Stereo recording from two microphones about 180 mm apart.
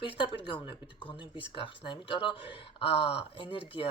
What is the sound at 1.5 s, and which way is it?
A woman's voice, 30° left (ahead or behind).